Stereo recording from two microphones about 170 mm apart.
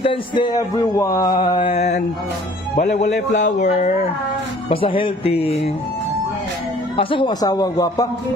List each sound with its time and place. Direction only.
0.0 s speech: 30° left (ahead or behind); by 3.9 s 45° left (ahead or behind)
4.7 s speech: 30° left (ahead or behind)
6.9 s speech: 30° left (ahead or behind)